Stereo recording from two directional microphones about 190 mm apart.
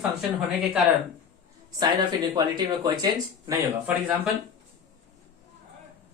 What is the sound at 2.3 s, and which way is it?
Speech, 20° right (ahead or behind).